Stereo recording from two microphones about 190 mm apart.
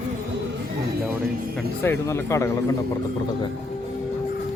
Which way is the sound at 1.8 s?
10° left (ahead or behind).